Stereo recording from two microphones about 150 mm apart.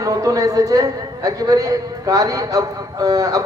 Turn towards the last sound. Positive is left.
turn(degrees=-25)  # may be behind; listen again after turning